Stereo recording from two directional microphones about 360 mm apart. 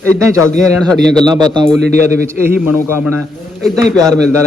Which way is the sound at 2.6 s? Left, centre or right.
Centre.